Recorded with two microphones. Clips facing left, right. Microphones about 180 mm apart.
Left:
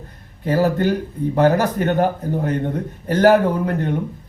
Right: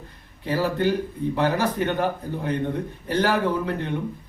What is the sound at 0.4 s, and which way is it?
A man's voice, 45° left (ahead or behind).